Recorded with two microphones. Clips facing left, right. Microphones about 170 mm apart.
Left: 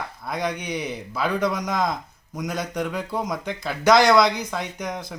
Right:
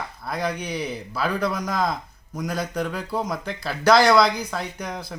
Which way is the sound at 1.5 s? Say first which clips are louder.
Left 1 dB; 20° left (ahead or behind).